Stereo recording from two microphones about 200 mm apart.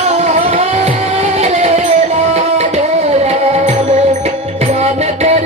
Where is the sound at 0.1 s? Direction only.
35° right (ahead or behind).